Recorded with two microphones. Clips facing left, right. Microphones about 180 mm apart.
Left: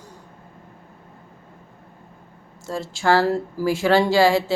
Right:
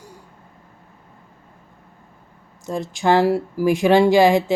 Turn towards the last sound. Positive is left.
turn(degrees=-20)  # may be behind; listen again after turning